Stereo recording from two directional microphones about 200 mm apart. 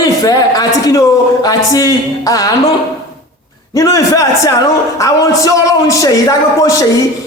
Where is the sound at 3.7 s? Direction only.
15° left (ahead or behind).